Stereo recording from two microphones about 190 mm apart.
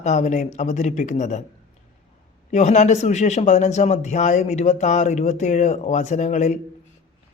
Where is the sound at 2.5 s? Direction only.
40° left (ahead or behind).